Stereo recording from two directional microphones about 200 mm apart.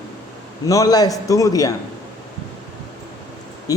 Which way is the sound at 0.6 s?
15° left (ahead or behind).